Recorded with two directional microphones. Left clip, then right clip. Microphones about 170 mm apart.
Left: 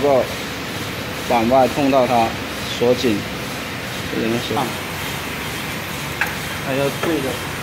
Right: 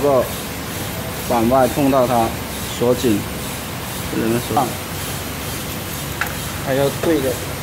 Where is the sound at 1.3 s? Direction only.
10° right (ahead or behind).